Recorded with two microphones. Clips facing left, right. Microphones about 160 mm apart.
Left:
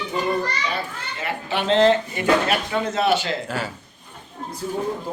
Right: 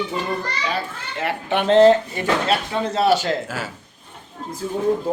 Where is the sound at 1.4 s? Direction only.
55° right (ahead or behind).